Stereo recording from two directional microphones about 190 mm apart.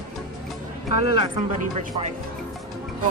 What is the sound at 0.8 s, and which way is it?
Speech, 75° left (ahead or behind).